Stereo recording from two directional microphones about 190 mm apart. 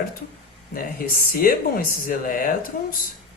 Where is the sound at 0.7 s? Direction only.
50° left (ahead or behind).